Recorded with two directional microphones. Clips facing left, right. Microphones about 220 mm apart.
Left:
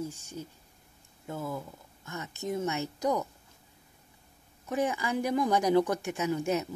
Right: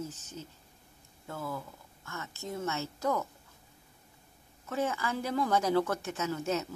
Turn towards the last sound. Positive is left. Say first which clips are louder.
# left 3 dB
turn(degrees=15)  # may be behind; listen again after turning